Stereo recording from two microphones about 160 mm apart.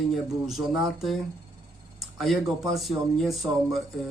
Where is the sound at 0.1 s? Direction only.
Centre (ahead or behind).